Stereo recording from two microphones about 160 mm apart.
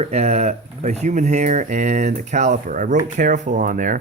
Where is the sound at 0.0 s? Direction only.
45° right (ahead or behind).